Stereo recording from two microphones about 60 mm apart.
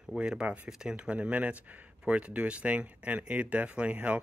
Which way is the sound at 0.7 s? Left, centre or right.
Centre.